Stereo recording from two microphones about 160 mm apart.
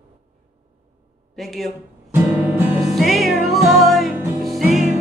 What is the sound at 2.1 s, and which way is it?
Music, 10° right (ahead or behind).